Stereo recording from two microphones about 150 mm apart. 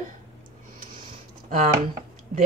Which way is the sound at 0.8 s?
70° right (ahead or behind).